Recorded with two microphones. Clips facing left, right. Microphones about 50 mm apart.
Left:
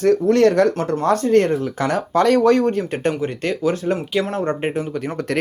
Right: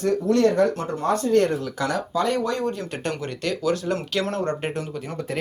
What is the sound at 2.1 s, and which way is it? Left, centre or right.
Speech, left.